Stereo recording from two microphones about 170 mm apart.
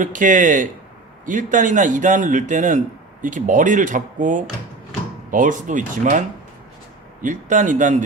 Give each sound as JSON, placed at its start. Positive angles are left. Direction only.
{"t": 0.0, "sound": "a man's voice", "side_deg": -50}